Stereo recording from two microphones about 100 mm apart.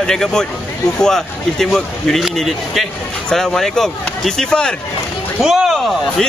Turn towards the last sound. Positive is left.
turn(degrees=0)  # may be behind; listen again after turning